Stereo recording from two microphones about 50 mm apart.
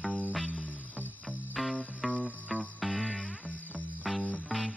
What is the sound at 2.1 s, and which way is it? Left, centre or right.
Music, centre.